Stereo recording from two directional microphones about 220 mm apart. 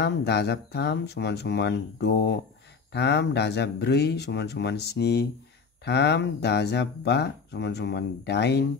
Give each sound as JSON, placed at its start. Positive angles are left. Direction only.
{"t": 0.0, "sound": "speech", "side_deg": 50}